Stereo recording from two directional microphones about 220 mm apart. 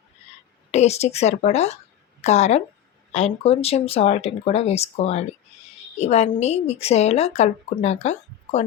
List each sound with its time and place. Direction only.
0.7 s speech: 30° left (ahead or behind)